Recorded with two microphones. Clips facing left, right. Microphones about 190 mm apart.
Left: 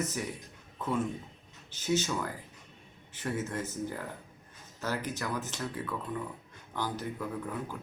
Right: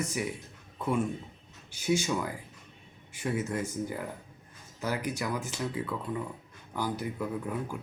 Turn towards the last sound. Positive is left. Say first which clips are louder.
# right 3 dB
turn(degrees=-10)  # may be behind; listen again after turning